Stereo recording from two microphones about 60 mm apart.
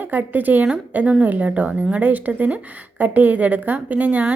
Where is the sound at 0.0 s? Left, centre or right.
Right.